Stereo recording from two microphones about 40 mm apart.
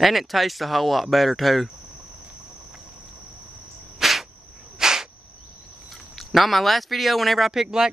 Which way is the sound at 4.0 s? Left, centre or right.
Centre.